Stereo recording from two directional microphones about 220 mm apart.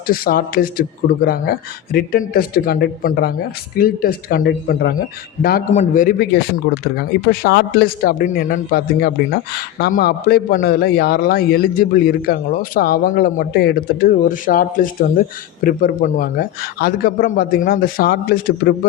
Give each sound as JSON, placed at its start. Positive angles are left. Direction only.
{"t": 0.1, "sound": "a man's voice", "side_deg": 40}